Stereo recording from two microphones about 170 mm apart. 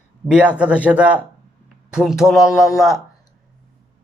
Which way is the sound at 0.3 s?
5° right (ahead or behind).